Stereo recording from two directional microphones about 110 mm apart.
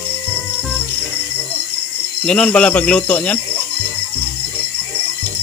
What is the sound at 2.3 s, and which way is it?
Speech, 10° left (ahead or behind).